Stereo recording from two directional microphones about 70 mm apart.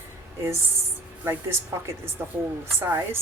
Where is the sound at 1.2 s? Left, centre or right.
Right.